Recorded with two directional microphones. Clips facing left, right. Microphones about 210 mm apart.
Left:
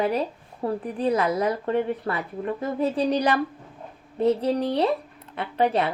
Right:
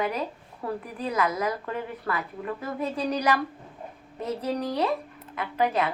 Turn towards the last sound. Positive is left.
turn(degrees=30)  # may be behind; listen again after turning